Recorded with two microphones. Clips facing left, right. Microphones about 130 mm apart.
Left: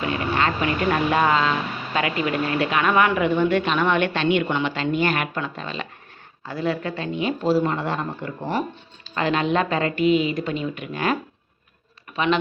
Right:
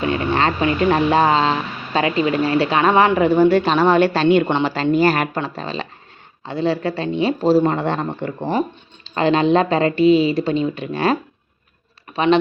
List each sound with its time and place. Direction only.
0.3 s speech: 30° right (ahead or behind)
8.4 s speech: 25° right (ahead or behind)